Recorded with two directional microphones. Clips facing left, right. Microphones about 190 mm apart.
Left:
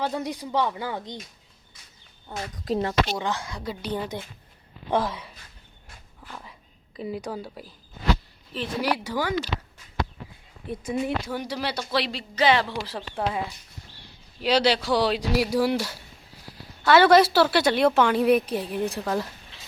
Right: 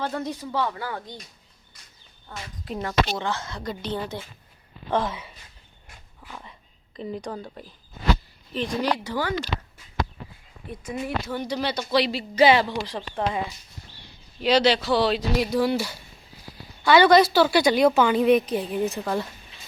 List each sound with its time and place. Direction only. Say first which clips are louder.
0.0 s speech: left 1 dB; 15° left (ahead or behind)
2.6 s speech: left 5 dB; 25° left (ahead or behind)
3.1 s speech: even; 15° left (ahead or behind); by 5.4 s centre (ahead or behind)
6.2 s whispering: even; centre (ahead or behind)
8.5 s speech: right 1 dB; 10° left (ahead or behind)
11.3 s speech: right 2 dB; 10° left (ahead or behind); by 12.6 s 10° right (ahead or behind)
12.6 s speech: right 2 dB; centre (ahead or behind)
14.4 s speech: right 2 dB; 10° left (ahead or behind)
15.7 s speech: right 1 dB; 5° right (ahead or behind)
16.8 s speech: even; 5° left (ahead or behind)